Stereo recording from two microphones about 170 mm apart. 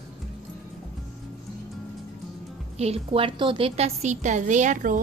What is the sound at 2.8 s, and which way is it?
A woman's voice, 35° right (ahead or behind).